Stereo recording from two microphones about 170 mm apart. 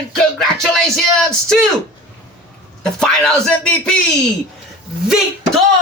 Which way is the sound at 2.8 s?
5° left (ahead or behind).